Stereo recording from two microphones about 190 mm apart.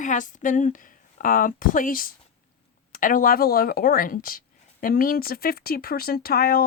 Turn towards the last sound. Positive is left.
turn(degrees=50)  # may be behind; listen again after turning